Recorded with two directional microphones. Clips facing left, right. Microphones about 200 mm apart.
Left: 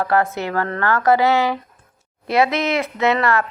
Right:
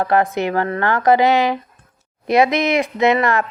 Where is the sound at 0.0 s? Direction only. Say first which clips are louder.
Right 2 dB; 20° right (ahead or behind).